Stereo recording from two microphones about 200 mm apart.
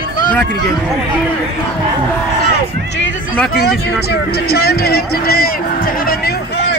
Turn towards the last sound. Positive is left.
turn(degrees=50)  # may be behind; listen again after turning